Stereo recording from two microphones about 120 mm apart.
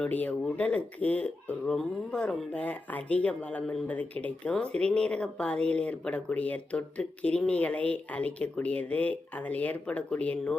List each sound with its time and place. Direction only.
0.0 s speech: 10° left (ahead or behind)